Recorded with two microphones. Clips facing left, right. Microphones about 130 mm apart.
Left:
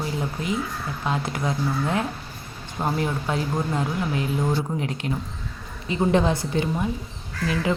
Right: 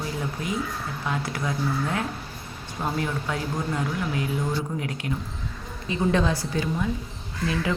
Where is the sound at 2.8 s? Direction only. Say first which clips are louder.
Left 3 dB; 20° left (ahead or behind).